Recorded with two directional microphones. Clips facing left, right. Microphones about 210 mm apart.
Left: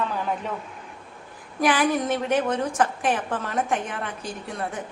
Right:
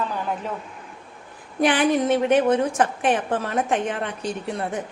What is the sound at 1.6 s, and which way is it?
A woman's voice, 25° right (ahead or behind).